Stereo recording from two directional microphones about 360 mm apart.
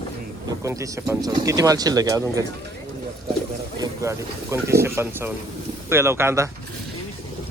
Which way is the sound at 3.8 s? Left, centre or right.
Centre.